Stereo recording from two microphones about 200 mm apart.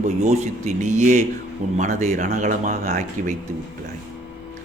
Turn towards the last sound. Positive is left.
turn(degrees=-35)  # may be behind; listen again after turning